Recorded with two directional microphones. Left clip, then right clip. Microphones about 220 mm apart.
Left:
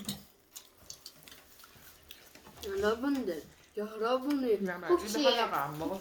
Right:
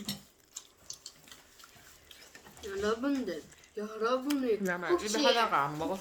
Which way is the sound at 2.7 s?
Centre (ahead or behind).